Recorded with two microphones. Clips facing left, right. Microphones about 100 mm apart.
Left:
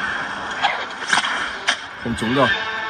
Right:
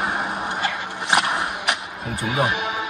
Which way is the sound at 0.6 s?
60° left (ahead or behind).